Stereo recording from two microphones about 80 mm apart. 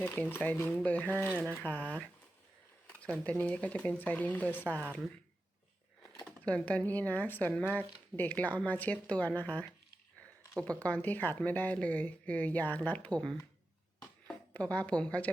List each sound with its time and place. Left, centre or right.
0.0 s speech: left
4.6 s a woman's voice: right
6.4 s speech: centre
14.5 s speech: centre